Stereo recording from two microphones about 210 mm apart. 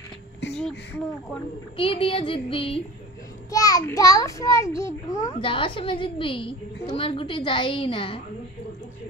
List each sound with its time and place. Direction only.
0.6 s speech: 5° left (ahead or behind)
1.8 s a woman's voice: 25° left (ahead or behind)